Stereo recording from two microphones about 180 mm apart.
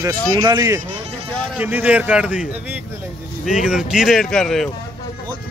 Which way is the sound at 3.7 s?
5° right (ahead or behind).